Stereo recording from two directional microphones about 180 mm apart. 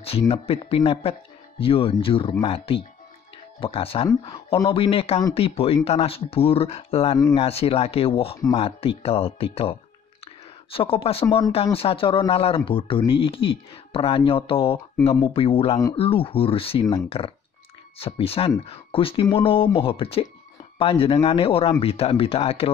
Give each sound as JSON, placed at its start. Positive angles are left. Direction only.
{"t": 0.3, "sound": "speech", "side_deg": 30}